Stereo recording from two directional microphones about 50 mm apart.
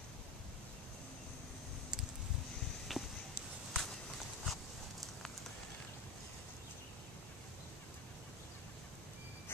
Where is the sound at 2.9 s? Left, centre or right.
Centre.